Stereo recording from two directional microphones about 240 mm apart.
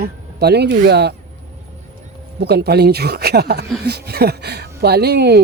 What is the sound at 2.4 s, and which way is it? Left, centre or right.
Speech, right.